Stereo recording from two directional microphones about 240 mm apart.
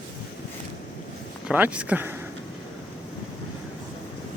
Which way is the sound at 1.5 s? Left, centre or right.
Centre.